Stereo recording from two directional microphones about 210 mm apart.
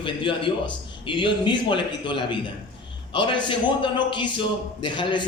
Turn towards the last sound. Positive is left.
turn(degrees=20)  # may be behind; listen again after turning